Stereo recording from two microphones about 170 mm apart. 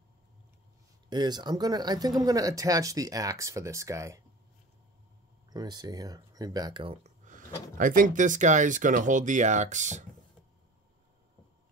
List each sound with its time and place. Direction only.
1.1 s speech: 25° right (ahead or behind)
5.5 s speech: 25° right (ahead or behind)
7.7 s speech: 55° right (ahead or behind)